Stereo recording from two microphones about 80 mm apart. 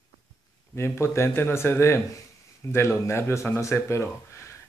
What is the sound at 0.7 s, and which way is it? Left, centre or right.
Speech, left.